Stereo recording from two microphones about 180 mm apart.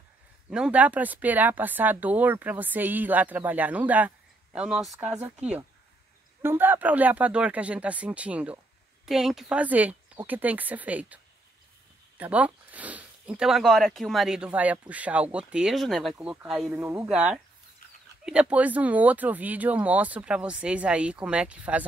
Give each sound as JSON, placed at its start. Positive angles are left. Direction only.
{"t": 0.5, "sound": "speech", "side_deg": -5}
{"t": 12.2, "sound": "speech", "side_deg": -5}
{"t": 16.8, "sound": "speech", "side_deg": -15}